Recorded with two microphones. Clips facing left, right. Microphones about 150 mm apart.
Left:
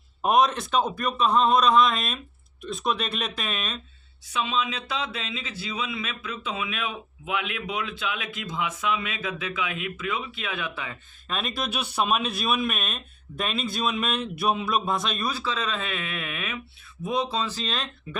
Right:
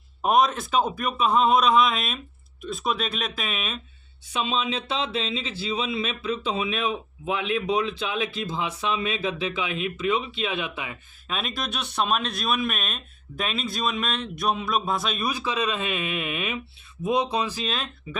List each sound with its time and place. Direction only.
0.2 s speech: centre (ahead or behind)
4.3 s speech: 25° right (ahead or behind)
11.3 s speech: centre (ahead or behind)
15.3 s speech: 15° right (ahead or behind)